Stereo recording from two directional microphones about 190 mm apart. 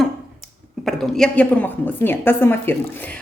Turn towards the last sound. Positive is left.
turn(degrees=10)  # may be behind; listen again after turning